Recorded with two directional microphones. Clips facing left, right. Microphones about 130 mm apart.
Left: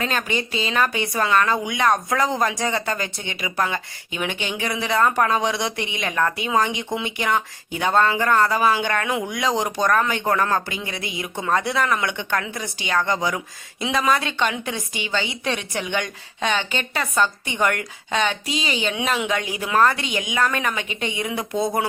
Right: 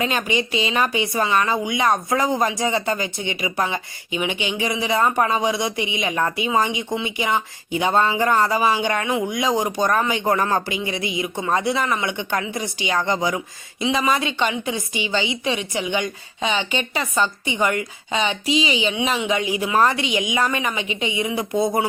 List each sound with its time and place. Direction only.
0.0 s a woman's voice: 10° right (ahead or behind)
12.1 s a woman's voice: 15° right (ahead or behind)
15.0 s speech: 50° left (ahead or behind)
15.4 s a woman's voice: 5° right (ahead or behind)
17.6 s a woman's voice: 5° right (ahead or behind)
18.4 s speech: 45° left (ahead or behind)
18.8 s speech: 5° right (ahead or behind)